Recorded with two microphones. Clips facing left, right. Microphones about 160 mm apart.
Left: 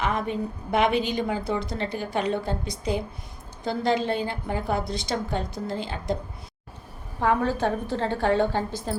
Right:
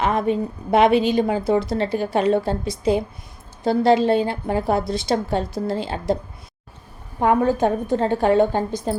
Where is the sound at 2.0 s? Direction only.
20° right (ahead or behind).